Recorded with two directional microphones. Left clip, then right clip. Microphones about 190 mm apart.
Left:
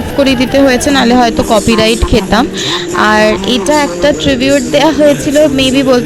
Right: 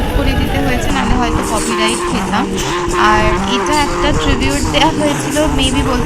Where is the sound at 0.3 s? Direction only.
45° left (ahead or behind).